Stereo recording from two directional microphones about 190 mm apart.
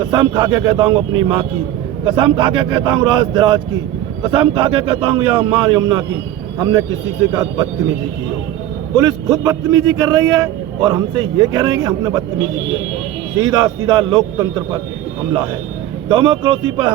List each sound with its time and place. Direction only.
0.1 s a man's voice: 25° right (ahead or behind)
2.0 s a man's voice: 25° right (ahead or behind)
9.0 s a man's voice: 20° right (ahead or behind)
13.4 s a man's voice: 20° right (ahead or behind)
16.0 s a man's voice: 25° right (ahead or behind)